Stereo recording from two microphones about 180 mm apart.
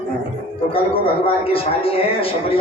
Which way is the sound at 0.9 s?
30° left (ahead or behind).